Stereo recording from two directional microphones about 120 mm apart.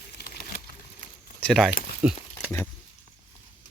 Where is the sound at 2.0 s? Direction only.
10° right (ahead or behind).